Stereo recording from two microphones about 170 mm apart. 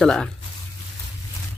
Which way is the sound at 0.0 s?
5° left (ahead or behind).